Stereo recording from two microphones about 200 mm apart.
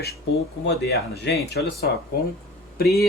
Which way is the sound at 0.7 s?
55° left (ahead or behind).